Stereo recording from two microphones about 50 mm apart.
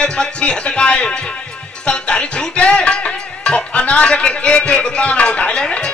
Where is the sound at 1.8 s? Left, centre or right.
Left.